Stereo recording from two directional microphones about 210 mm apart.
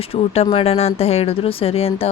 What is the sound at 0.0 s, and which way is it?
Speech, 30° left (ahead or behind).